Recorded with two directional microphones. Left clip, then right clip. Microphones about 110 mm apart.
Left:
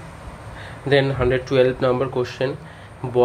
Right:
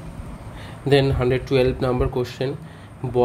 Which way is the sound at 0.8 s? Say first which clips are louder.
Even; 30° right (ahead or behind).